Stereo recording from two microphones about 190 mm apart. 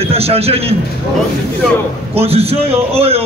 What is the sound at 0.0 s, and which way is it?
Speech, 30° right (ahead or behind).